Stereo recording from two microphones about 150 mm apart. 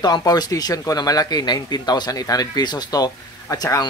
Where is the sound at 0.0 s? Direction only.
25° left (ahead or behind).